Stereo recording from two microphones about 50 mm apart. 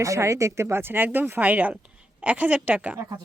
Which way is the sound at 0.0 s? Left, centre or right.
Right.